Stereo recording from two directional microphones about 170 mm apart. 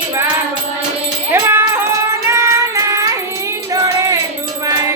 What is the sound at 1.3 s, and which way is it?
Cat, 15° right (ahead or behind).